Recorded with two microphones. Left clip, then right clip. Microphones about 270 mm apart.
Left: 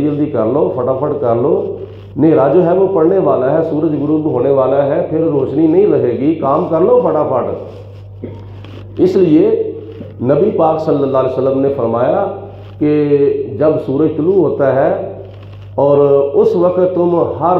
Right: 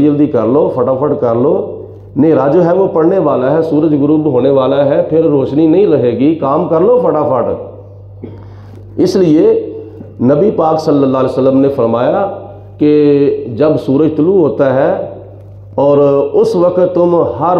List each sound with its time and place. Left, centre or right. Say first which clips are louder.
0.0 s speech: right 4 dB; right
9.1 s a man's voice: right 3 dB; right